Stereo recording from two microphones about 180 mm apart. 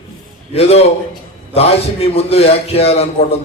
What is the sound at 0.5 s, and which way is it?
Speech, 35° left (ahead or behind).